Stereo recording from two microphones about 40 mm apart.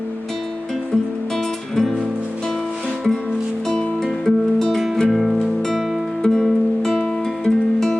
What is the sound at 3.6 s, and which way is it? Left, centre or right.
Music, centre.